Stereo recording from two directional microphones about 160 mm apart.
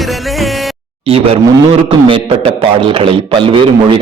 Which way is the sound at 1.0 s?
35° right (ahead or behind).